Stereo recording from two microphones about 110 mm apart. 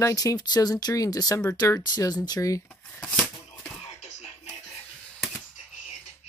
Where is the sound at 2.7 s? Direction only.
10° left (ahead or behind).